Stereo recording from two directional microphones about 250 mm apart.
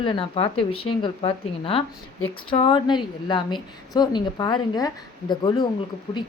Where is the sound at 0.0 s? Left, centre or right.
Left.